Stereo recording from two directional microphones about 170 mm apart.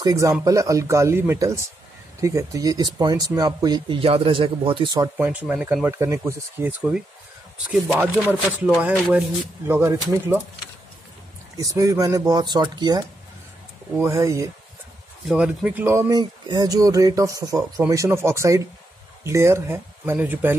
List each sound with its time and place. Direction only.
0.0 s speech: 20° right (ahead or behind)
5.1 s speech: 10° right (ahead or behind)
8.2 s chopping: 10° left (ahead or behind)
8.5 s speech: 10° right (ahead or behind)
11.5 s speech: 20° right (ahead or behind)
15.2 s speech: 5° right (ahead or behind)